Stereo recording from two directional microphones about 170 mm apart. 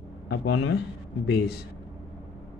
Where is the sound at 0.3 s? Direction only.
90° left.